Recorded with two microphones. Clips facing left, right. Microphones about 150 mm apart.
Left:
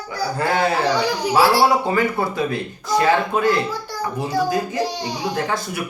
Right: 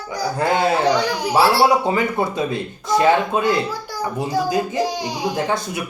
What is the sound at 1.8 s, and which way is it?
A child's voice, 20° right (ahead or behind).